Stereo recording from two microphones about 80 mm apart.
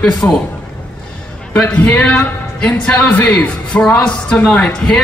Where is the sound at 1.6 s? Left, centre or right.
Centre.